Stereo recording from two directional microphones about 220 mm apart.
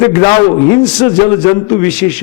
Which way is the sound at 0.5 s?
15° left (ahead or behind).